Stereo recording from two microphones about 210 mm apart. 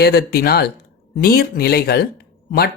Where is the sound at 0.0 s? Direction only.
45° left (ahead or behind).